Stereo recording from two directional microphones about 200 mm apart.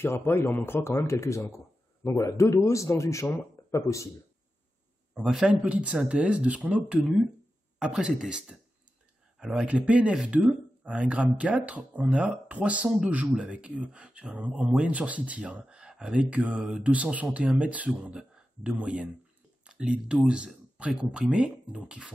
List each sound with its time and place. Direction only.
0.0 s speech: 10° left (ahead or behind)
5.1 s speech: centre (ahead or behind)